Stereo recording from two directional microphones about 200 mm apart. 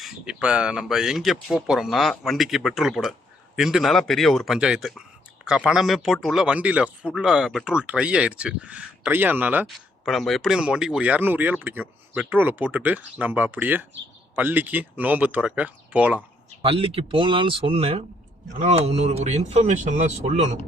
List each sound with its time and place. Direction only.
0.0 s speech: 5° right (ahead or behind)
16.6 s speech: 30° right (ahead or behind)